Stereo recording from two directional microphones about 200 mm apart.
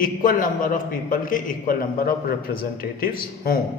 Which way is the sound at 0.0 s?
45° left (ahead or behind).